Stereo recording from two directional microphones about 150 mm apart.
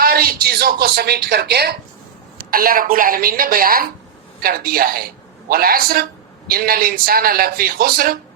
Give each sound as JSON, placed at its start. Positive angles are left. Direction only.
{"t": 0.0, "sound": "a woman's voice", "side_deg": -90}
{"t": 2.4, "sound": "a man's voice", "side_deg": -75}